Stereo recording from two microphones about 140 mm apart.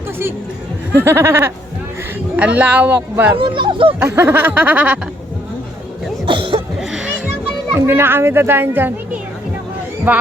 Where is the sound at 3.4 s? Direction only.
35° right (ahead or behind).